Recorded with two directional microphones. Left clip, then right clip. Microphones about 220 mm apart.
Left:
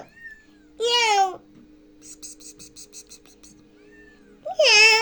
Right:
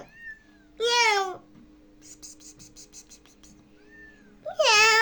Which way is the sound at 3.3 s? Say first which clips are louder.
Left 4 dB; centre (ahead or behind).